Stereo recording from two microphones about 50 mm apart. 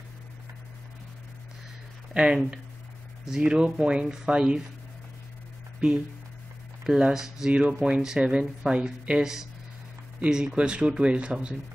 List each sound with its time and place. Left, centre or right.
2.1 s speech: centre
7.0 s speech: centre